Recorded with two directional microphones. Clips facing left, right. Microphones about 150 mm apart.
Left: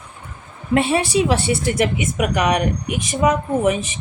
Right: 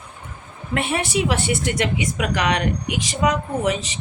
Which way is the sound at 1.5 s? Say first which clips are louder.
Left 2 dB; 30° left (ahead or behind).